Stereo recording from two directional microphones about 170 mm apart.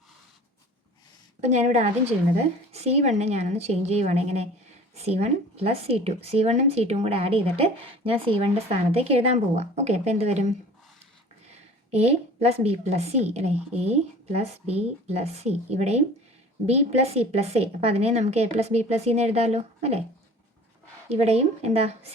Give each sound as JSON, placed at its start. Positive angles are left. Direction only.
{"t": 1.4, "sound": "a woman's voice", "side_deg": -40}
{"t": 11.5, "sound": "a woman's voice", "side_deg": -40}
{"t": 21.1, "sound": "a woman's voice", "side_deg": -40}